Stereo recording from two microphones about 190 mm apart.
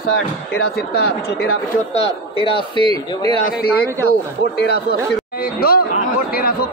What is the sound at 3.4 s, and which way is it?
Speech, 55° left (ahead or behind).